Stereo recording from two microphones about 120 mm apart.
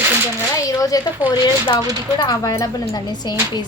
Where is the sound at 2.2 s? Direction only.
30° left (ahead or behind).